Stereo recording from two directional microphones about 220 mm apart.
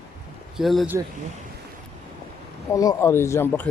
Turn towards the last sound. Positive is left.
turn(degrees=10)  # may be behind; listen again after turning